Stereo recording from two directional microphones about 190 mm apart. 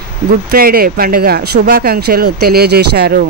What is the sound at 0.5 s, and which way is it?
Speech, 50° right (ahead or behind).